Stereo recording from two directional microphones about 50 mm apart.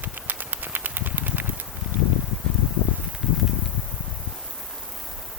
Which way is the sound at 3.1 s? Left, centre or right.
Centre.